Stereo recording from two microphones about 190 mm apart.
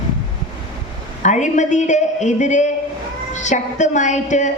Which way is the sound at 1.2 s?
40° left (ahead or behind).